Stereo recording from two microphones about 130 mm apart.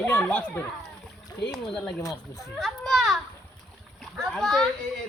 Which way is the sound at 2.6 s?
Centre (ahead or behind).